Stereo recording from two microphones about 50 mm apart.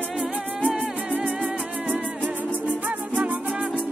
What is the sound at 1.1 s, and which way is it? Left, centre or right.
Music, right.